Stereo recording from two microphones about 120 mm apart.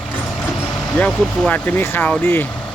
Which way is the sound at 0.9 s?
10° left (ahead or behind).